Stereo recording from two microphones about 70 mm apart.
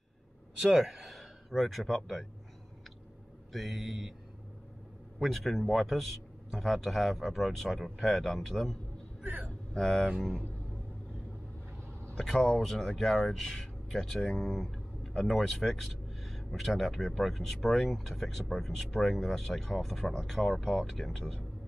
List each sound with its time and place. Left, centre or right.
0.6 s speech: centre
3.5 s speech: centre
5.2 s speech: centre
9.2 s a sound: right
9.8 s speech: centre
12.2 s speech: centre